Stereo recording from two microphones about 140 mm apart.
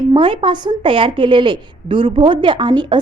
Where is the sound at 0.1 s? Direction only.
35° right (ahead or behind).